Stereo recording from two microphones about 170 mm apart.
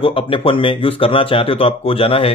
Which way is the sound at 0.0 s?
30° left (ahead or behind).